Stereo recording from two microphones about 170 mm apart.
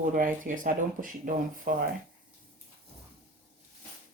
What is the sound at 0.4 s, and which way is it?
Speech, 50° right (ahead or behind).